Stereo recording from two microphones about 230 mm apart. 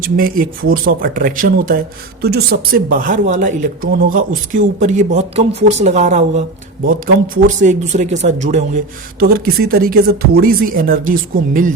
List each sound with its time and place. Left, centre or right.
0.0 s a woman's voice: right
7.4 s speech: right